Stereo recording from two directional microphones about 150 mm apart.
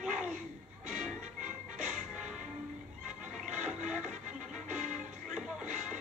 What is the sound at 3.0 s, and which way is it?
Music, 55° right (ahead or behind).